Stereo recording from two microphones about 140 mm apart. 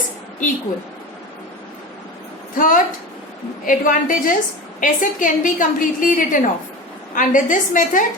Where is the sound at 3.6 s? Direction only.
70° left (ahead or behind).